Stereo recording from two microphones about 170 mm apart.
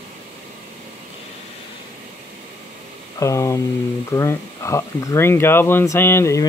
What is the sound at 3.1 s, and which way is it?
Speech, 20° left (ahead or behind).